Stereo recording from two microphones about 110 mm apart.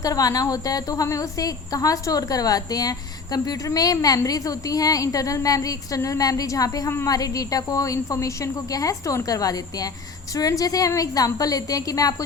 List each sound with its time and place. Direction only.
0.0 s a woman's voice: 30° left (ahead or behind)